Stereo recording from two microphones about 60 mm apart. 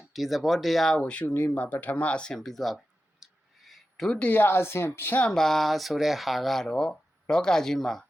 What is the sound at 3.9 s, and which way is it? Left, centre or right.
Speech, centre.